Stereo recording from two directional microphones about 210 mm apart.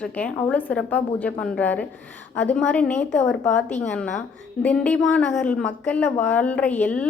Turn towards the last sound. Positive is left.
turn(degrees=5)  # may be behind; listen again after turning